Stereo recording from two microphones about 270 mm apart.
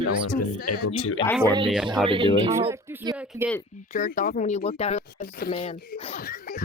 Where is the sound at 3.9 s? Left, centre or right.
Left.